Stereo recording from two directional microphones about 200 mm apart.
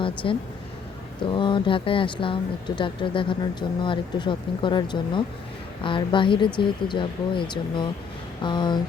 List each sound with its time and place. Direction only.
0.0 s speech: 25° left (ahead or behind)